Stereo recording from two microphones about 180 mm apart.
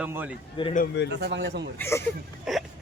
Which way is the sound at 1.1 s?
70° right (ahead or behind).